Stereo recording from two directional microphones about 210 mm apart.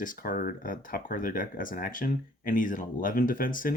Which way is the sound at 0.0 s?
40° left (ahead or behind).